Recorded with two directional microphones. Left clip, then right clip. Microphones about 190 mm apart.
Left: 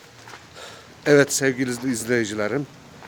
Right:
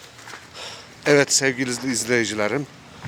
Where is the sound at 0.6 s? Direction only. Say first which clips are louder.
Right 4 dB; 20° left (ahead or behind).